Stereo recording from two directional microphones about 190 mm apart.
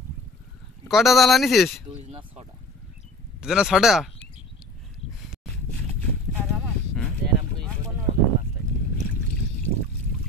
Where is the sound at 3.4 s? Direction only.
5° right (ahead or behind).